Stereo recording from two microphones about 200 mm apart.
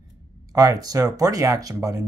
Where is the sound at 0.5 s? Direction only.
20° right (ahead or behind).